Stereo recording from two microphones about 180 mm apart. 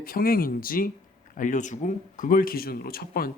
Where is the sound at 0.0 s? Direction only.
55° left (ahead or behind).